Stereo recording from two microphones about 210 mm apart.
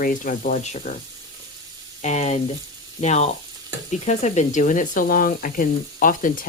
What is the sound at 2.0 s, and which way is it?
Speech, 30° left (ahead or behind).